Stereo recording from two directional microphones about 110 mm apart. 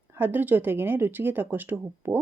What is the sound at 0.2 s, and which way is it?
Speech, 15° right (ahead or behind).